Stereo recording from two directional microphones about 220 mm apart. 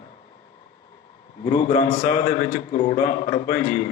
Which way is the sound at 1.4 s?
30° left (ahead or behind).